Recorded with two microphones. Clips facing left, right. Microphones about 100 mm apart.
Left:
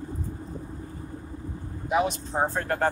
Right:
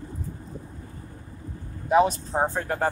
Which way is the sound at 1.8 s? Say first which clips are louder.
Right 5 dB; 35° right (ahead or behind).